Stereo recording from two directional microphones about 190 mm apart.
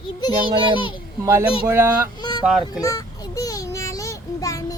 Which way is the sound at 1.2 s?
15° right (ahead or behind).